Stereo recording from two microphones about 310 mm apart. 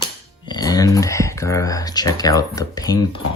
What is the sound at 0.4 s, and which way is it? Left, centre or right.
Speech, centre.